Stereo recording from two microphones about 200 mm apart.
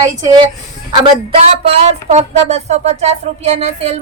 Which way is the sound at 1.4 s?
30° right (ahead or behind).